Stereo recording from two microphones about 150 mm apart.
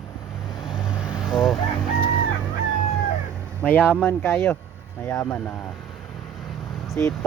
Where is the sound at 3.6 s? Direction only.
10° left (ahead or behind).